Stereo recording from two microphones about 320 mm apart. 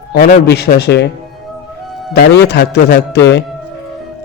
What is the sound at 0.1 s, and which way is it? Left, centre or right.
A man's voice, left.